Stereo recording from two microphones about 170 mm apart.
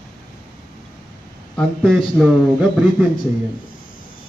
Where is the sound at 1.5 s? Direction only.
Centre (ahead or behind).